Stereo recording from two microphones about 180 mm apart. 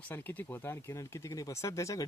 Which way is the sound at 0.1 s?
10° left (ahead or behind).